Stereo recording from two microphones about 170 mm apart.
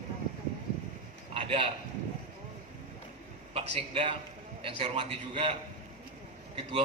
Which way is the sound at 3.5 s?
35° right (ahead or behind).